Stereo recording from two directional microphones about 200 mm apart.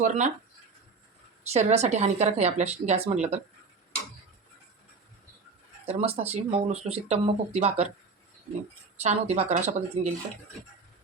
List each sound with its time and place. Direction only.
0.0 s speech: 35° right (ahead or behind)
1.5 s speech: 35° right (ahead or behind)
5.8 s speech: 30° right (ahead or behind)
9.0 s speech: 30° right (ahead or behind)